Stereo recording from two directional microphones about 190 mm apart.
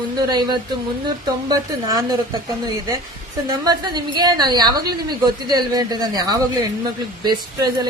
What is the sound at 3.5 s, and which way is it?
A woman's voice, 20° right (ahead or behind).